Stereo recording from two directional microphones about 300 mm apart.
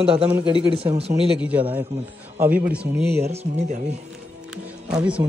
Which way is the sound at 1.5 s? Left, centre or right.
Centre.